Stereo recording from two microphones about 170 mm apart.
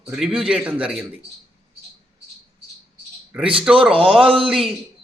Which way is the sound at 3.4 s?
30° right (ahead or behind).